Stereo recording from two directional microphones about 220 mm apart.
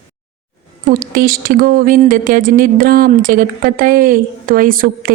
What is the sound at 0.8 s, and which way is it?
A woman's voice, 40° right (ahead or behind).